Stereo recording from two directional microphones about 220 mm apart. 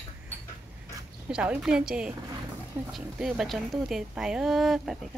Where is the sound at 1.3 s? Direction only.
5° right (ahead or behind).